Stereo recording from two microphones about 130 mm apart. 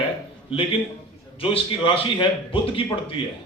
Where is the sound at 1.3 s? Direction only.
45° left (ahead or behind).